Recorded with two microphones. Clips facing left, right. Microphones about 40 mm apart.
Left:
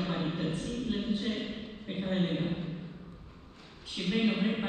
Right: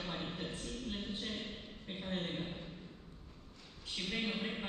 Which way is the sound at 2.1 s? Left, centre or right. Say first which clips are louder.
Left 9 dB; left.